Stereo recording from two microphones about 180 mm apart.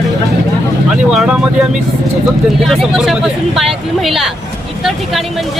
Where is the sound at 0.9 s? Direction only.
5° right (ahead or behind).